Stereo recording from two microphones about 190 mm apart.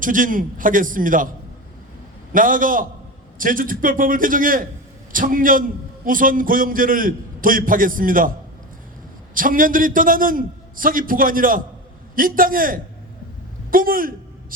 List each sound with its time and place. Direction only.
0.0 s a man's voice: 45° right (ahead or behind)
2.3 s a man's voice: 45° right (ahead or behind)
9.3 s a man's voice: 45° right (ahead or behind)